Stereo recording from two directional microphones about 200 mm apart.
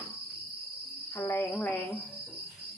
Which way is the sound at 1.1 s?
10° left (ahead or behind).